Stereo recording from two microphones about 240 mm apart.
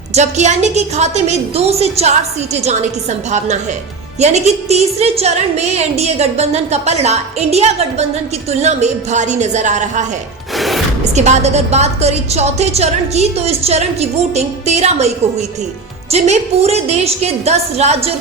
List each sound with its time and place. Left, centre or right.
0.1 s a woman's voice: right
10.6 s a sound: centre
11.1 s a woman's voice: right